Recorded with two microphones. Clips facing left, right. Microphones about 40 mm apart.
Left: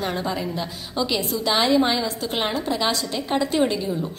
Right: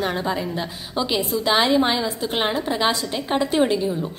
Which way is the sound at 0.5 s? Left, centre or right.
Centre.